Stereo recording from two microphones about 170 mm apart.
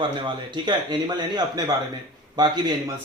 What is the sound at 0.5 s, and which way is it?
A man's voice, 25° right (ahead or behind).